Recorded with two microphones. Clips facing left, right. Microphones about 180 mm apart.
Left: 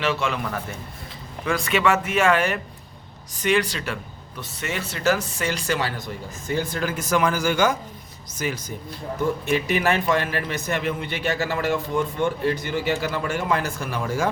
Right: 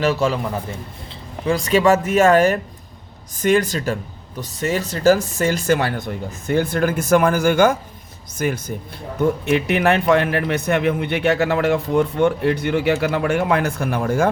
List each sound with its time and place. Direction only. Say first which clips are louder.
0.0 s speech: right 6 dB; 40° right (ahead or behind)
1.5 s speech: right 6 dB; 35° right (ahead or behind); by 14.3 s 55° right (ahead or behind)